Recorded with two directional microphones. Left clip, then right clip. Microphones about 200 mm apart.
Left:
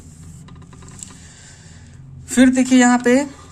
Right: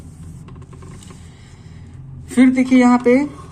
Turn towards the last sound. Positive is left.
turn(degrees=40)  # may be behind; listen again after turning